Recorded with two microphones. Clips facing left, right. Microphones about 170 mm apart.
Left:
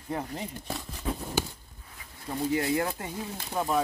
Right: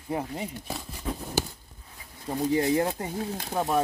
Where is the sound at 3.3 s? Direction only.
45° right (ahead or behind).